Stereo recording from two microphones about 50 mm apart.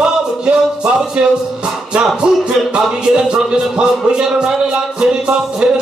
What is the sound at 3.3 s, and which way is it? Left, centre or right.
Music, centre.